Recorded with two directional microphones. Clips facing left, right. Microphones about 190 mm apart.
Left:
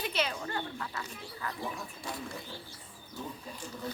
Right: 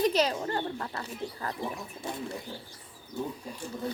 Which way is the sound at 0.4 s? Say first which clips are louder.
Right 5 dB; 40° right (ahead or behind).